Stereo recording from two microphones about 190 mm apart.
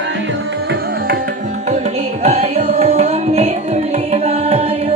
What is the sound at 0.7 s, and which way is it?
Tabla, 50° right (ahead or behind).